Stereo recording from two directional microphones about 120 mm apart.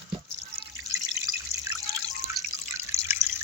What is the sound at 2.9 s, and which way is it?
Drip, 20° right (ahead or behind).